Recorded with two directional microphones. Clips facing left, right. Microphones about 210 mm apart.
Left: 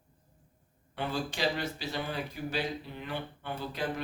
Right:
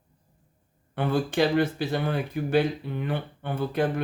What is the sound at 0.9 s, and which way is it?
Speech, 55° right (ahead or behind).